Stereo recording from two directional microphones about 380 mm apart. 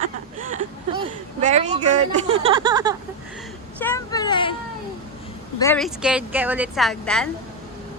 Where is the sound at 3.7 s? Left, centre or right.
Centre.